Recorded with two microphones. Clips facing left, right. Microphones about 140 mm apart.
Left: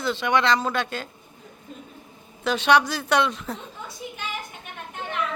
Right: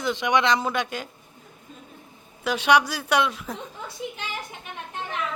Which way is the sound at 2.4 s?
10° right (ahead or behind).